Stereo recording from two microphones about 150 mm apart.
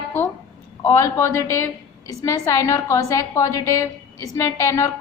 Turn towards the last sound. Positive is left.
turn(degrees=20)  # may be behind; listen again after turning